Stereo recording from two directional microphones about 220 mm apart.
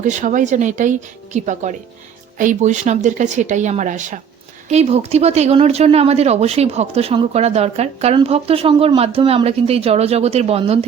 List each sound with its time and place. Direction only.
0.0 s speech: 35° right (ahead or behind)